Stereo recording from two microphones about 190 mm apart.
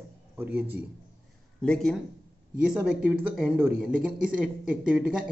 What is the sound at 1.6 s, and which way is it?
A man's voice, 5° left (ahead or behind).